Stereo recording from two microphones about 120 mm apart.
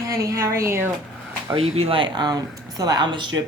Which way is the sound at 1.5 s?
60° right (ahead or behind).